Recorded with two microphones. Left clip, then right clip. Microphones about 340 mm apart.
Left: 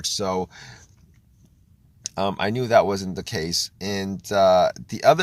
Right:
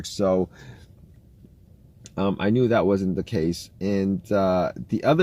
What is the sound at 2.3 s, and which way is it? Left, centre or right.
Speech, left.